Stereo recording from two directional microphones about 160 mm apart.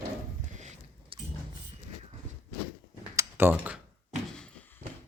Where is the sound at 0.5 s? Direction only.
50° right (ahead or behind).